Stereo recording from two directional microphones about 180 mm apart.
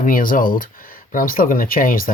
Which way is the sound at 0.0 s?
50° left (ahead or behind).